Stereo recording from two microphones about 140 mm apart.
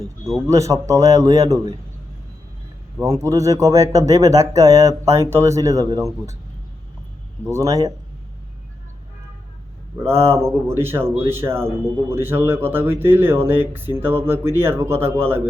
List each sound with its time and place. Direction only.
0.4 s speech: 25° right (ahead or behind)
3.0 s speech: 25° right (ahead or behind)
7.4 s speech: 20° right (ahead or behind)
10.1 s speech: 20° right (ahead or behind)